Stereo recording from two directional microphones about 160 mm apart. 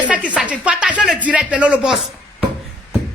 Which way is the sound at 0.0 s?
10° right (ahead or behind).